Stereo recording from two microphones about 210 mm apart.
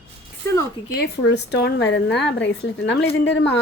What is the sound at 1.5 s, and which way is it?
A woman's voice, 50° left (ahead or behind).